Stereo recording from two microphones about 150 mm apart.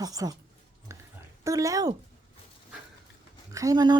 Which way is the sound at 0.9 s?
20° right (ahead or behind).